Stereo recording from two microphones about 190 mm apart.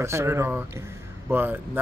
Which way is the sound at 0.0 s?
15° right (ahead or behind).